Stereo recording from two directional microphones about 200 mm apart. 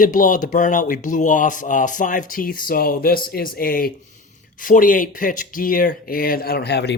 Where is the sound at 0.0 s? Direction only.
40° left (ahead or behind).